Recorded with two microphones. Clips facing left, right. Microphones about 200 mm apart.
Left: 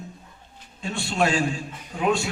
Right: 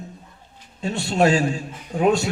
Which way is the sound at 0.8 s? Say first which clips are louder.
Right 5 dB; 40° right (ahead or behind).